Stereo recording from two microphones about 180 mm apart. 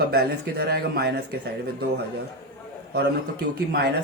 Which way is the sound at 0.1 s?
60° right (ahead or behind).